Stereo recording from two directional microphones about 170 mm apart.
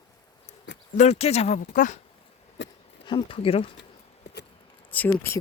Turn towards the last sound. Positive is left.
turn(degrees=15)  # may be behind; listen again after turning